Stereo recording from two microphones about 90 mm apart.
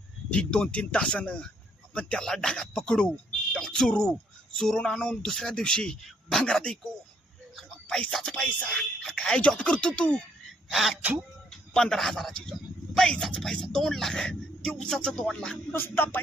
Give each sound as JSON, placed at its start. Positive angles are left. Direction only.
{"t": 0.3, "sound": "speech", "side_deg": 10}
{"t": 10.7, "sound": "speech", "side_deg": 0}
{"t": 15.7, "sound": "music", "side_deg": 25}